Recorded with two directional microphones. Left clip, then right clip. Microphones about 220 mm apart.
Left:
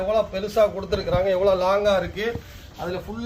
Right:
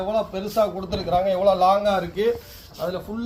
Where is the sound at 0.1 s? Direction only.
40° left (ahead or behind).